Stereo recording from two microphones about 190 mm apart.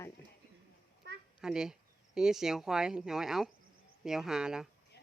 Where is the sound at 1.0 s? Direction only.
60° right (ahead or behind).